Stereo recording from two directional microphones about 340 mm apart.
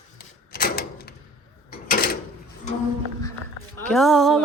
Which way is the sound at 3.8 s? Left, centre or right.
Centre.